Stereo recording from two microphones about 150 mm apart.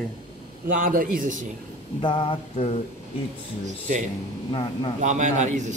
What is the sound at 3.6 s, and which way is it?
Speech, 55° right (ahead or behind).